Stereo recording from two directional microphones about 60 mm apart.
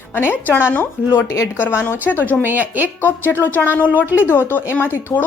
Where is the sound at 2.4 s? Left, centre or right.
Right.